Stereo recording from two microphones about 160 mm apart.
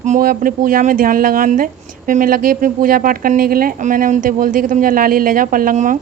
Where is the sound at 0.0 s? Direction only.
55° right (ahead or behind).